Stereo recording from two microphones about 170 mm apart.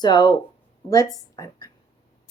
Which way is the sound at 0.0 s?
25° left (ahead or behind).